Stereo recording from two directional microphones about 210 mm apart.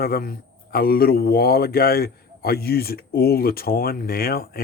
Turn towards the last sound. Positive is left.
turn(degrees=45)  # may be behind; listen again after turning